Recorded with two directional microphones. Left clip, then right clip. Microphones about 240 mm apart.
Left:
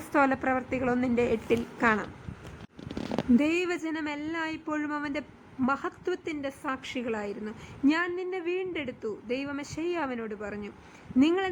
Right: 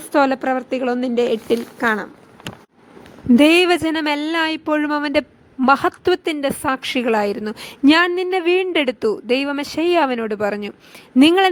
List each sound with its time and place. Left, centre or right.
0.1 s a woman's voice: right
3.3 s a woman's voice: right